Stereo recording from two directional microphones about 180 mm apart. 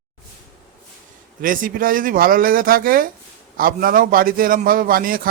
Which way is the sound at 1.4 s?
50° right (ahead or behind).